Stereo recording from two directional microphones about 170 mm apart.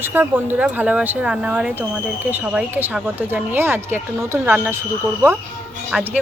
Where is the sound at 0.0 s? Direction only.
10° right (ahead or behind).